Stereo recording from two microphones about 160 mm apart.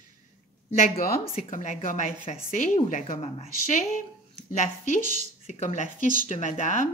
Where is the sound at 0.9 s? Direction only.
70° left (ahead or behind).